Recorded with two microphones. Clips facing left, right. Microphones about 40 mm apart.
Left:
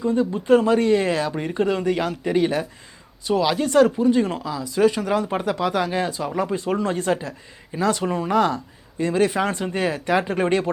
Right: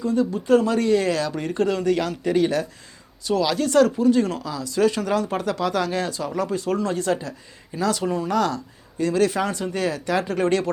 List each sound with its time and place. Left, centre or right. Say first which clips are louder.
0.0 s speech: left 1 dB; left